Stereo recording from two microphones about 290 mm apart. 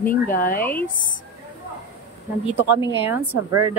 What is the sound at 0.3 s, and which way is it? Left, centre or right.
Speech, left.